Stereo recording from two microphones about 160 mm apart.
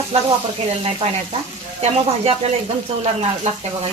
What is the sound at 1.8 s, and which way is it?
Speech, 40° right (ahead or behind).